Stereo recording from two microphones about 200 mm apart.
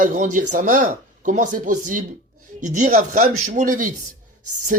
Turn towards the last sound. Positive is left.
turn(degrees=-40)  # may be behind; listen again after turning